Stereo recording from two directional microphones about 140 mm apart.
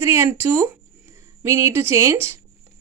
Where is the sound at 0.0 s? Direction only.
15° right (ahead or behind).